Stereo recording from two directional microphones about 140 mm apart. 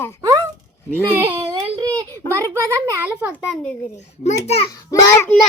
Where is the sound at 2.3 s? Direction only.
20° right (ahead or behind).